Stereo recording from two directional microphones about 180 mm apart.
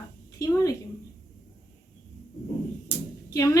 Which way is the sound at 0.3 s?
20° left (ahead or behind).